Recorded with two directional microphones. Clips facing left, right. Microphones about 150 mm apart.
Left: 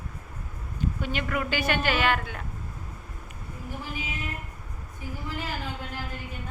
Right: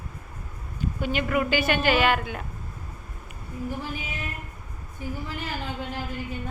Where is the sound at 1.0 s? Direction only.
5° right (ahead or behind).